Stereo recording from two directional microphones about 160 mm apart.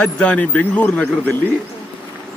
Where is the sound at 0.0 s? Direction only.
5° left (ahead or behind).